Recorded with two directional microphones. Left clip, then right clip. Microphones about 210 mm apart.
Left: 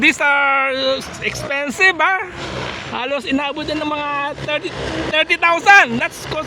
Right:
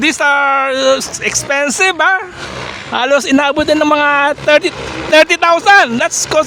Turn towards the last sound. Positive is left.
turn(degrees=-45)  # may be behind; listen again after turning